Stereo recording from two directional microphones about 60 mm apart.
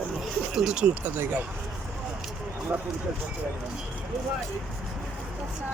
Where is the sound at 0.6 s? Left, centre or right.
Centre.